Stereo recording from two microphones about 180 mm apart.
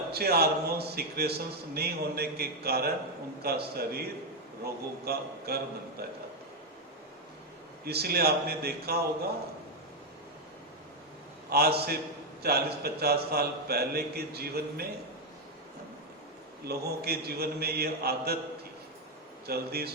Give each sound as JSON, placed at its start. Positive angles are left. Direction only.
{"t": 0.1, "sound": "a man's voice", "side_deg": -60}
{"t": 7.9, "sound": "a man's voice", "side_deg": -60}
{"t": 11.4, "sound": "a man's voice", "side_deg": -60}
{"t": 16.6, "sound": "a man's voice", "side_deg": -60}
{"t": 19.5, "sound": "a man's voice", "side_deg": -60}